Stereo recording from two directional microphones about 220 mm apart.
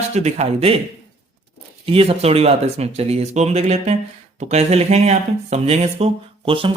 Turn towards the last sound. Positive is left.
turn(degrees=-25)  # may be behind; listen again after turning